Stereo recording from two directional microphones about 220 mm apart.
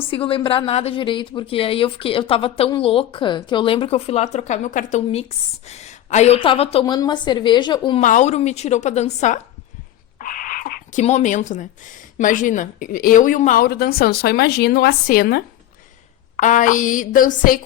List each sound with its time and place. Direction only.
0.0 s a woman's voice: 25° left (ahead or behind)
8.0 s a woman's voice: 35° left (ahead or behind)
10.2 s a sound: 35° left (ahead or behind)
11.0 s a woman's voice: 30° left (ahead or behind)